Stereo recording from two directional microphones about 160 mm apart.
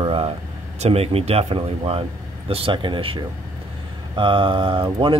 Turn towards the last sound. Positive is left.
turn(degrees=-30)  # may be behind; listen again after turning